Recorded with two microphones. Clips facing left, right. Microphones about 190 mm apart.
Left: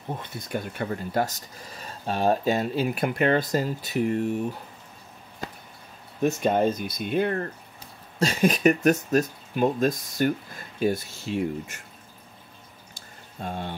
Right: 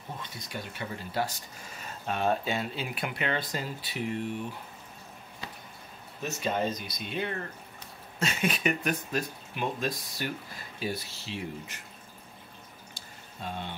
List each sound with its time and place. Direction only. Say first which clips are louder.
0.2 s speech: left 8 dB; 55° left (ahead or behind)
5.4 s a sound: left 7 dB; 45° left (ahead or behind)
6.2 s speech: left 8 dB; 55° left (ahead or behind)
8.2 s speech: left 8 dB; 35° left (ahead or behind)
13.4 s speech: left 5 dB; 45° left (ahead or behind)